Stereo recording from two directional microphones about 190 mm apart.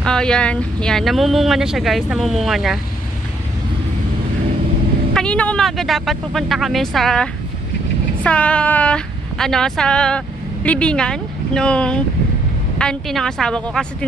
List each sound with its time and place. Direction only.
0.0 s speech: 5° left (ahead or behind)
5.1 s a woman's voice: 5° left (ahead or behind)